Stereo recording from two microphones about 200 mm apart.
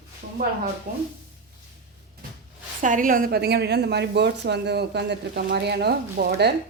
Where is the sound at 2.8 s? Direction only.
40° right (ahead or behind).